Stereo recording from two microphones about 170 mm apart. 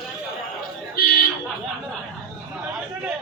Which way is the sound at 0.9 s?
65° left (ahead or behind).